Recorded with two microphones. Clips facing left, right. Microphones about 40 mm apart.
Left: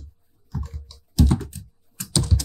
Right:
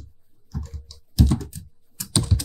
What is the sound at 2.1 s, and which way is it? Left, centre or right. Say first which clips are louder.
Typing: even; centre.